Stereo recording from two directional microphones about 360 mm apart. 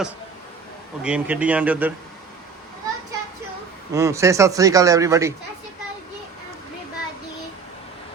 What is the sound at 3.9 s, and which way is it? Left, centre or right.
Speech, centre.